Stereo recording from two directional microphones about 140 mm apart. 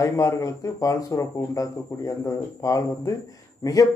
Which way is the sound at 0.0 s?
20° left (ahead or behind).